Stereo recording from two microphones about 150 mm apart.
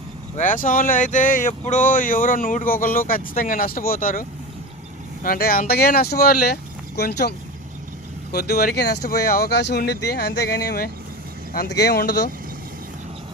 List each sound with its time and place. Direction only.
0.3 s speech: 60° left (ahead or behind); by 10.8 s 90° left
11.9 s speech: 90° left